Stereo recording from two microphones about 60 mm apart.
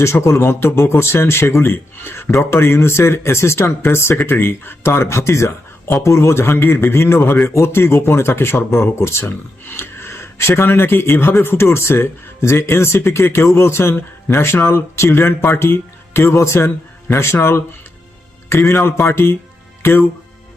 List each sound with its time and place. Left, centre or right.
0.0 s speech: left
18.4 s a man's voice: left